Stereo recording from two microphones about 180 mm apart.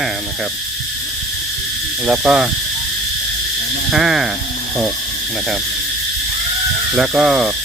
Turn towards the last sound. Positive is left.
turn(degrees=0)  # may be behind; listen again after turning